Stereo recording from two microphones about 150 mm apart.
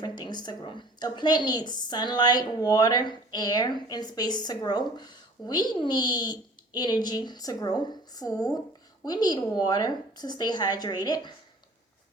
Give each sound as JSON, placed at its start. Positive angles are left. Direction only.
{"t": 0.0, "sound": "a woman's voice", "side_deg": 30}